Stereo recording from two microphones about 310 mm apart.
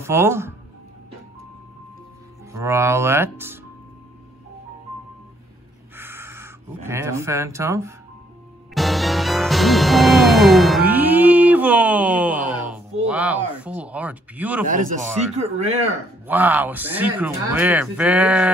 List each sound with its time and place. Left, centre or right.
0.0 s speech: centre
2.5 s speech: centre
5.9 s speech: centre
8.7 s music: centre
13.1 s speech: centre
14.7 s speech: right
16.3 s speech: centre